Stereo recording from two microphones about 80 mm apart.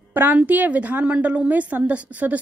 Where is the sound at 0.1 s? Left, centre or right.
Right.